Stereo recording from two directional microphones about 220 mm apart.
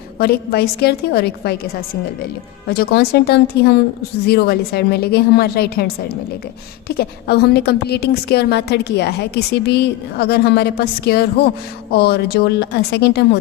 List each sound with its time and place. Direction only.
0.2 s a woman's voice: 45° left (ahead or behind)
2.6 s a woman's voice: 45° left (ahead or behind)